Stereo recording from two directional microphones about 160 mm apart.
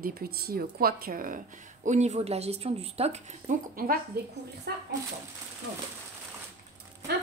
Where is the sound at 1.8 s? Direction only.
45° right (ahead or behind).